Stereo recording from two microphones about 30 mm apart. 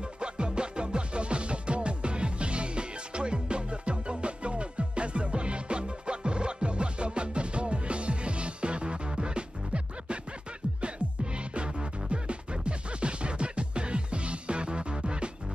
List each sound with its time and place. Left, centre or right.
0.2 s music: right
11.3 s music: right